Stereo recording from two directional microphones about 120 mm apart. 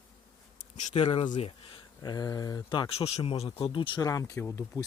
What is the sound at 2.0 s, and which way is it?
Speech, 30° left (ahead or behind).